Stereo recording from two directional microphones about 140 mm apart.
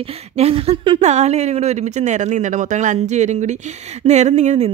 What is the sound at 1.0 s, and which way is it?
Speech, 50° right (ahead or behind).